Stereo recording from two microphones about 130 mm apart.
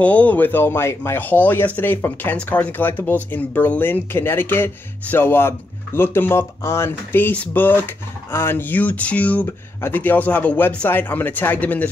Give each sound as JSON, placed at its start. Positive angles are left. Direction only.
{"t": 0.0, "sound": "speech", "side_deg": 10}